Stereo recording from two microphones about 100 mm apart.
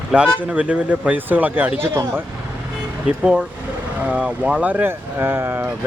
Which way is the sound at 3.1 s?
10° right (ahead or behind).